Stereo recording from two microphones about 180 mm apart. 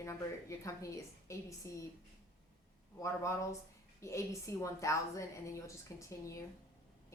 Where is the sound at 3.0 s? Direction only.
15° left (ahead or behind).